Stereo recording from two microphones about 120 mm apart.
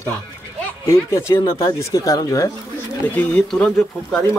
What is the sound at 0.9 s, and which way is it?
Speech, 25° left (ahead or behind).